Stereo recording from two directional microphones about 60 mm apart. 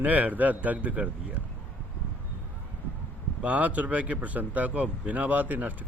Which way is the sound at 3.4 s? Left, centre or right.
Right.